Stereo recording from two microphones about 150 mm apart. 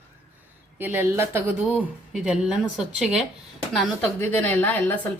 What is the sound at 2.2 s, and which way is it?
Speech, 5° right (ahead or behind).